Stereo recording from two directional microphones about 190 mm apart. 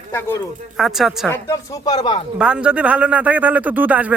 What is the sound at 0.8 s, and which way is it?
Speech, centre (ahead or behind).